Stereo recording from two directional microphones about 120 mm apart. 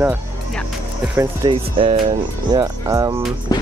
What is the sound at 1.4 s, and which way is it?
Speech, 45° right (ahead or behind).